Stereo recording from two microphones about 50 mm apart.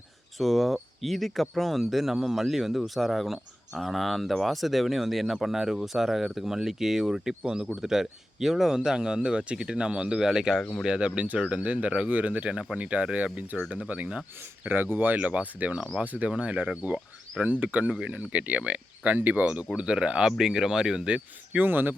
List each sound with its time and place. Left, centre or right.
0.3 s speech: centre; by 14.7 s right
14.7 s speech: right; by 21.1 s centre
21.6 s speech: right